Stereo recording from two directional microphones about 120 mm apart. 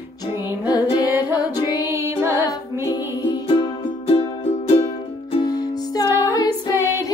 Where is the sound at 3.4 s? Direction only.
50° left (ahead or behind).